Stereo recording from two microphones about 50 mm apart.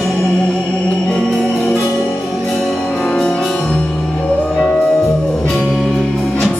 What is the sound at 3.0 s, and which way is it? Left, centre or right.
Music, centre.